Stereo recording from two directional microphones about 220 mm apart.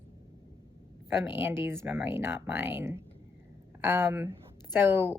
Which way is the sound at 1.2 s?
10° right (ahead or behind).